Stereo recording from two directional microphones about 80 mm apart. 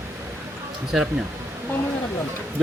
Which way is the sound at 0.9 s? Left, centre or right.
Centre.